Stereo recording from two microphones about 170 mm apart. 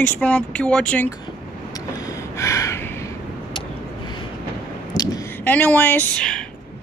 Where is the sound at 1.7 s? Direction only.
20° left (ahead or behind).